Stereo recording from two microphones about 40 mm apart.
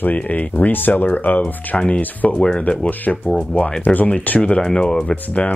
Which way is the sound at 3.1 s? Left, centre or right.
Centre.